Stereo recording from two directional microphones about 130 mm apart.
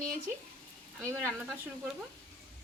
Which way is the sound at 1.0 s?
20° right (ahead or behind).